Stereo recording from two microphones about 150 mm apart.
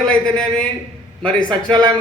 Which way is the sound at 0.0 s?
5° left (ahead or behind).